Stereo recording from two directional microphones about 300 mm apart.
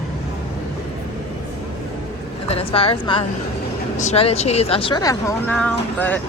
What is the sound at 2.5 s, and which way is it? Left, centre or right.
Speech, centre.